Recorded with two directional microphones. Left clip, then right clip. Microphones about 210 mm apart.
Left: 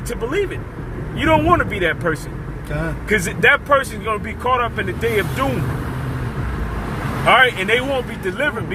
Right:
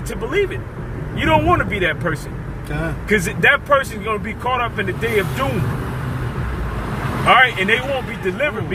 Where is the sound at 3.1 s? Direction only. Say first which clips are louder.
Even; 30° left (ahead or behind).